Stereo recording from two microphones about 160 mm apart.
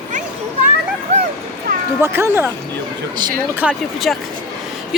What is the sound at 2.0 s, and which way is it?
Speech, 15° right (ahead or behind).